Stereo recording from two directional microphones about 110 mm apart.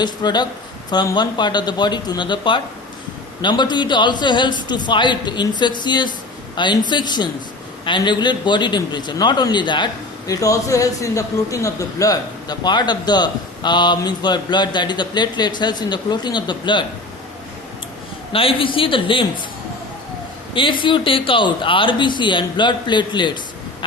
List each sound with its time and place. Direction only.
0.0 s a man's voice: 40° left (ahead or behind)
10.2 s a man's voice: 30° left (ahead or behind)
18.3 s a man's voice: 55° left (ahead or behind)
20.5 s a man's voice: 50° left (ahead or behind)